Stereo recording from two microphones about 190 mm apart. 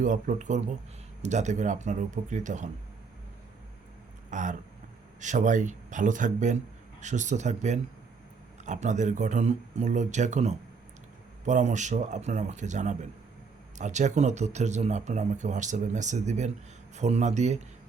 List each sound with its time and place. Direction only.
0.0 s speech: 45° right (ahead or behind)
4.3 s speech: 40° right (ahead or behind)